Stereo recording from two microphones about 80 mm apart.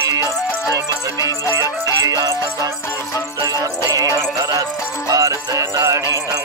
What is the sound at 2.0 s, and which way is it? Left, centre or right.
Music, right.